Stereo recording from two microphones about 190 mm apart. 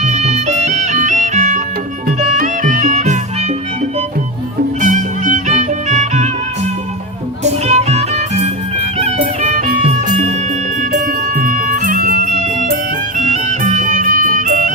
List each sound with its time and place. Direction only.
0.0 s music: 35° right (ahead or behind)
4.8 s music: 40° right (ahead or behind)
7.4 s music: 35° right (ahead or behind)